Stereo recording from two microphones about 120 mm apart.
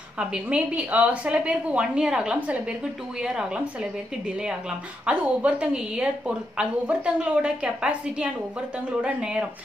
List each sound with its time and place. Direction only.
0.2 s a woman's voice: 10° right (ahead or behind)